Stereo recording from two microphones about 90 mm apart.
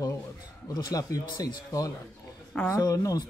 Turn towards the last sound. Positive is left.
turn(degrees=40)  # may be behind; listen again after turning